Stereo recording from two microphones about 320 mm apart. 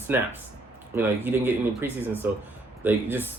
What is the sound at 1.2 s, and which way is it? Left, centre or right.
Speech, centre.